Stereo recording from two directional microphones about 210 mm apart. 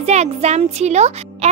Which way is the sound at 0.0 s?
30° right (ahead or behind).